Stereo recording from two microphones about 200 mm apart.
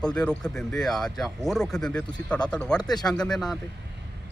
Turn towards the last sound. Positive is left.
turn(degrees=0)  # may be behind; listen again after turning